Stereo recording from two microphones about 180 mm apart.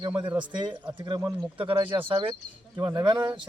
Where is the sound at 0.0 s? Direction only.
25° right (ahead or behind).